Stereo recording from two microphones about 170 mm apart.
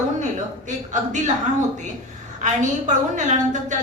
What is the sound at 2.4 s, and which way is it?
Speech, 45° right (ahead or behind).